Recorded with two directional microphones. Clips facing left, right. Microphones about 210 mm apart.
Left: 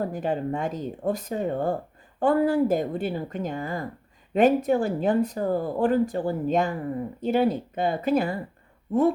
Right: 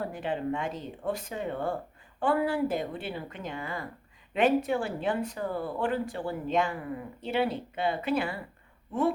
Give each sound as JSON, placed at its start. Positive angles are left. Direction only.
{"t": 0.0, "sound": "speech", "side_deg": 40}